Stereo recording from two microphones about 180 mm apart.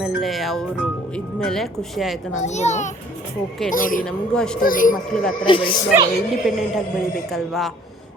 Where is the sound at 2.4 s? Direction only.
40° left (ahead or behind).